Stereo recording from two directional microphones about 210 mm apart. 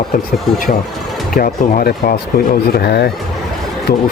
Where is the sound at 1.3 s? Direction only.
45° left (ahead or behind).